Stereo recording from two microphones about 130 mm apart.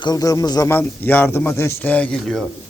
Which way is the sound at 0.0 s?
30° left (ahead or behind).